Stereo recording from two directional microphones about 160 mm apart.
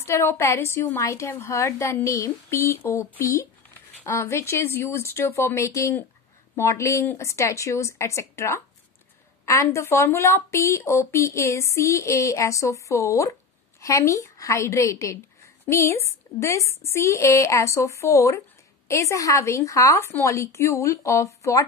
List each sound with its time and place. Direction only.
0.0 s a woman's voice: 15° left (ahead or behind)